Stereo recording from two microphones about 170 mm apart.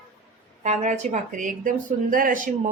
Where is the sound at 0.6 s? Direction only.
40° right (ahead or behind).